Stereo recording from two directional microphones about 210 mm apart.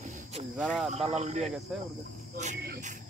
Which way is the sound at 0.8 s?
30° right (ahead or behind).